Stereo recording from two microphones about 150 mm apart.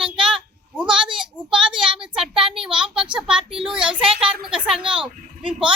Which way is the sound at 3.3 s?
40° right (ahead or behind).